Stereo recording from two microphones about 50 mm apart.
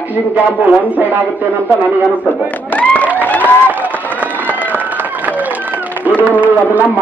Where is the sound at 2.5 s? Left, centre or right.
Left.